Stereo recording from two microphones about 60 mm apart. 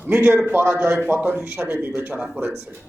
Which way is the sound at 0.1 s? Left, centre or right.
Right.